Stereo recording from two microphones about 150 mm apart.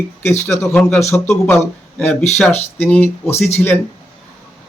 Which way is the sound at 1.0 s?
20° left (ahead or behind).